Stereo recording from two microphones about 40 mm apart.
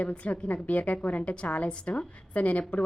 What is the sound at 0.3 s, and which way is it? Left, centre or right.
A woman's voice, left.